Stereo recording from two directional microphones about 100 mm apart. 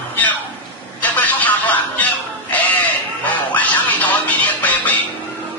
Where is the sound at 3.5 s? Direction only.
15° left (ahead or behind).